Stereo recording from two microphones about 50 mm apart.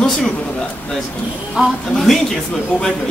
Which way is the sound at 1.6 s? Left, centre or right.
Centre.